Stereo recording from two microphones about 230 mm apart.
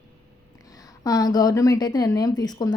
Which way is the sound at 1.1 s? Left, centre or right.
Centre.